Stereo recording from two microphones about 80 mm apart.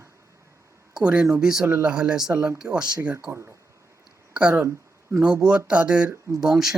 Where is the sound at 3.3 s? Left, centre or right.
Right.